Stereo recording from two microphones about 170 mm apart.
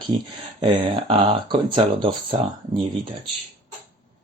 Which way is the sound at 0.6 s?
30° right (ahead or behind).